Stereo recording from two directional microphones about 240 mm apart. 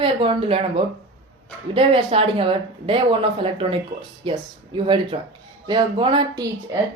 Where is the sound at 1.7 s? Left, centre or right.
Right.